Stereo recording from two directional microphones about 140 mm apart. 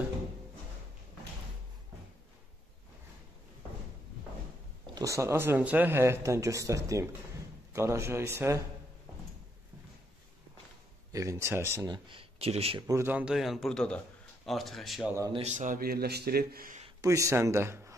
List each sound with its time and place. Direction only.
4.9 s speech: 20° right (ahead or behind)
11.1 s speech: 25° right (ahead or behind)
11.8 s speech: 35° right (ahead or behind)
12.8 s a man's voice: 20° right (ahead or behind); by 15.0 s centre (ahead or behind)
15.4 s speech: 60° right (ahead or behind); by 16.8 s 80° right
17.0 s speech: 20° right (ahead or behind)